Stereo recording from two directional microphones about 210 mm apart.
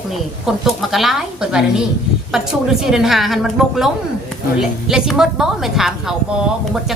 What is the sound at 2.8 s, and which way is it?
Speech, centre (ahead or behind).